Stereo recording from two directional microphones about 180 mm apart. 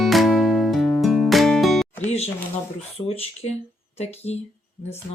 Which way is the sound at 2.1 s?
35° left (ahead or behind).